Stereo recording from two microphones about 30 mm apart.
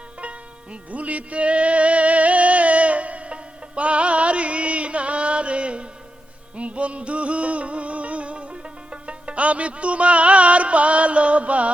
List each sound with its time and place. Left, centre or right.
0.2 s music: right